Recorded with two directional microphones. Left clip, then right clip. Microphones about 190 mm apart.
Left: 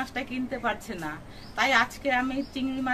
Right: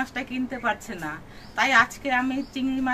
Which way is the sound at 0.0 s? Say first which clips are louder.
Right 3 dB; 5° left (ahead or behind).